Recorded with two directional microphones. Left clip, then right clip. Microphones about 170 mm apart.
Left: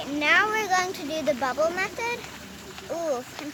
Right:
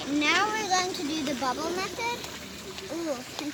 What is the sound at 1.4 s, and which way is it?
Speech, 55° left (ahead or behind).